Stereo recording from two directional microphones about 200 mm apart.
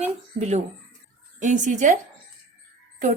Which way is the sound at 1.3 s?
40° right (ahead or behind).